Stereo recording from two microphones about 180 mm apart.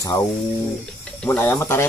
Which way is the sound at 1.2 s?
10° left (ahead or behind).